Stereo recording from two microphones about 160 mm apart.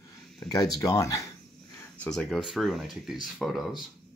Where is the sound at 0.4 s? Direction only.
25° left (ahead or behind).